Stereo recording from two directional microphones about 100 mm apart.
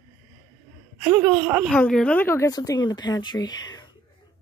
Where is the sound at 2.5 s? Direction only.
40° left (ahead or behind).